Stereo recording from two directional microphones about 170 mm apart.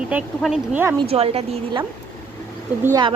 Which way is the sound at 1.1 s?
35° right (ahead or behind).